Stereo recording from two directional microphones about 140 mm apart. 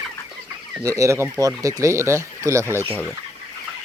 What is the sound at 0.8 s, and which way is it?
Speech, 20° right (ahead or behind).